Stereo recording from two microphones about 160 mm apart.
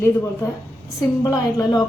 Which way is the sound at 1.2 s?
20° left (ahead or behind).